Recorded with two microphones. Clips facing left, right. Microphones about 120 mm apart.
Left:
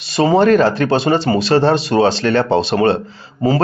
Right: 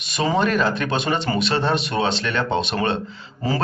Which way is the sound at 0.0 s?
35° left (ahead or behind).